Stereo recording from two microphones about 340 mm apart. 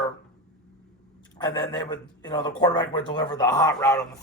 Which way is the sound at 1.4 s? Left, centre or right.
Centre.